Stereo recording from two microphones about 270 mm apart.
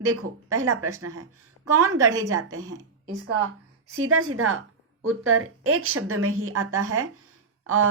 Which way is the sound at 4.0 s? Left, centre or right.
Right.